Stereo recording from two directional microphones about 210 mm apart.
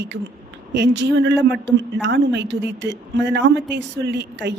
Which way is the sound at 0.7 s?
55° right (ahead or behind).